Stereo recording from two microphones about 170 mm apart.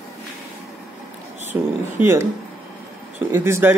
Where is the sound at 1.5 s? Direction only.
10° right (ahead or behind).